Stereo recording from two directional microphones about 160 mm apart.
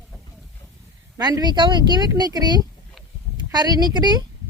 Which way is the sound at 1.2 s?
25° right (ahead or behind).